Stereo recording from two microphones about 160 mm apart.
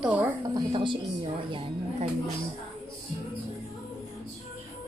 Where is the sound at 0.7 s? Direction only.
30° right (ahead or behind).